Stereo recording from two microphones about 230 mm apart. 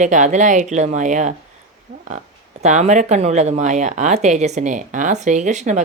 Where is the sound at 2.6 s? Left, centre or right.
Right.